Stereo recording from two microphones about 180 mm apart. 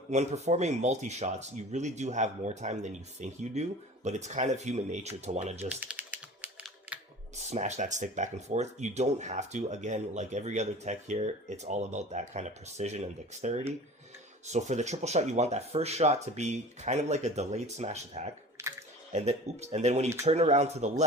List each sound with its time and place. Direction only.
0.1 s speech: 40° right (ahead or behind)
5.6 s typing: 5° right (ahead or behind)
7.3 s speech: 40° right (ahead or behind)
18.6 s a sound: 15° right (ahead or behind)
19.1 s speech: 35° right (ahead or behind)